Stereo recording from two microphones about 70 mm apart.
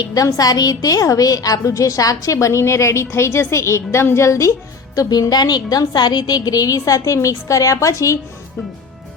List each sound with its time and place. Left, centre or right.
0.0 s a woman's voice: left
4.9 s a woman's voice: left